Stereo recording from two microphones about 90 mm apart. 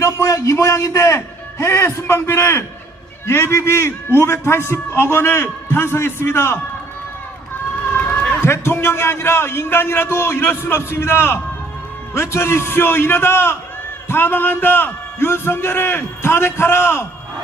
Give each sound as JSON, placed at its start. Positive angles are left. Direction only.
{"t": 0.0, "sound": "a man's voice", "side_deg": 35}
{"t": 7.9, "sound": "a man's voice", "side_deg": 25}